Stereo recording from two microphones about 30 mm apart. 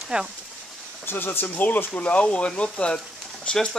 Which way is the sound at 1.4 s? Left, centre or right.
Left.